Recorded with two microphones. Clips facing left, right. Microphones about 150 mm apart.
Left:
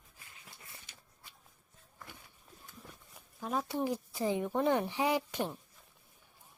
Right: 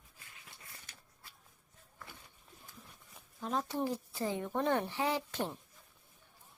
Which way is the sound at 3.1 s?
5° left (ahead or behind).